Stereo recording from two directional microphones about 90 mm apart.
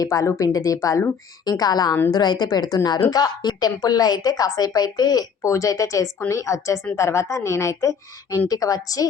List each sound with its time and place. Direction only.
0.0 s a woman's voice: 40° left (ahead or behind)